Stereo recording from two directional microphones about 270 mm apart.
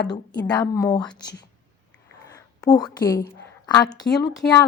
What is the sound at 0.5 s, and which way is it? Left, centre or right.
A woman's voice, centre.